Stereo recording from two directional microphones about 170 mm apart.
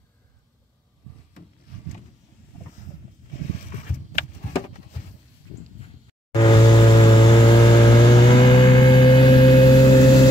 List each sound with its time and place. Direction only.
6.3 s vehicle: 25° left (ahead or behind)